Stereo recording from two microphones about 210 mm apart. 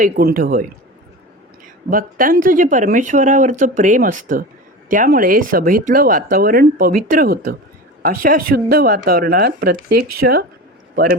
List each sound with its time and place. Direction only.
0.0 s speech: 45° right (ahead or behind)
1.9 s a man's voice: 40° right (ahead or behind)